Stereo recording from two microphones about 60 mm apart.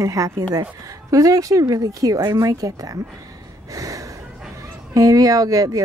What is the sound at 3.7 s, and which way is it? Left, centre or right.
Gasp, right.